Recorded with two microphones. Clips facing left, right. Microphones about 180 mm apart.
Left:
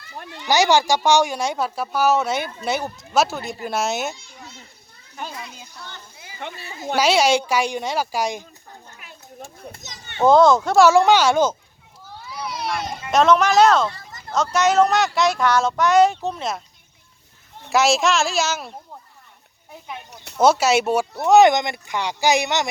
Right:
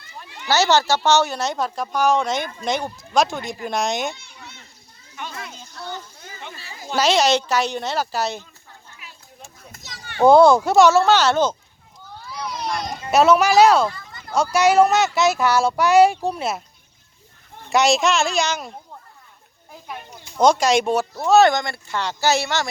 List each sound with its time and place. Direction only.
0.4 s a woman's voice: 15° left (ahead or behind)
5.2 s a child's voice: 35° left (ahead or behind)
6.4 s speech: 60° left (ahead or behind)
6.9 s speech: 10° left (ahead or behind)
9.0 s children playing: 50° left (ahead or behind)
9.8 s children playing: 20° left (ahead or behind)
10.2 s speech: 10° right (ahead or behind)
10.8 s speech: 15° left (ahead or behind)
12.2 s a sound: 5° left (ahead or behind)
13.1 s speech: 10° right (ahead or behind)
17.7 s a woman's voice: centre (ahead or behind)
20.3 s speech: 5° left (ahead or behind)